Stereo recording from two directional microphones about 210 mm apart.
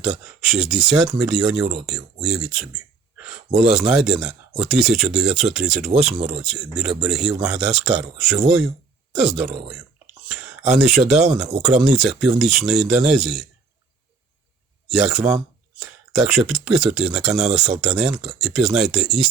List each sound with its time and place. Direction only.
0.4 s speech: centre (ahead or behind)
14.8 s speech: centre (ahead or behind)